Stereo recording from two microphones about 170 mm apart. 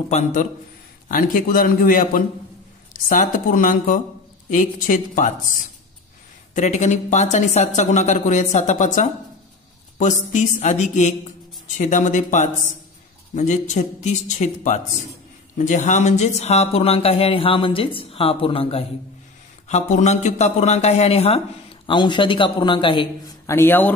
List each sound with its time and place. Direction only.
0.1 s a man's voice: 50° left (ahead or behind); by 23.0 s 30° left (ahead or behind)
23.4 s a man's voice: 15° left (ahead or behind)